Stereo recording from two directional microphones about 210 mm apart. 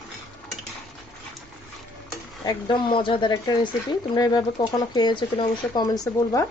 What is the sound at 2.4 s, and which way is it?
Speech, 20° left (ahead or behind).